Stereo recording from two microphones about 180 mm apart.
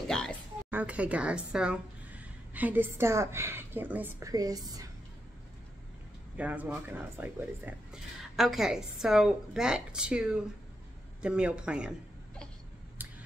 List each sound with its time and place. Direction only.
0.1 s speech: 5° left (ahead or behind)
0.7 s a woman's voice: 10° right (ahead or behind)
4.3 s a woman's voice: 20° right (ahead or behind)
6.3 s speech: 10° right (ahead or behind)